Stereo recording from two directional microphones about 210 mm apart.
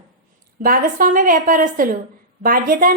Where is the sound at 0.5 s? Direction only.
40° right (ahead or behind).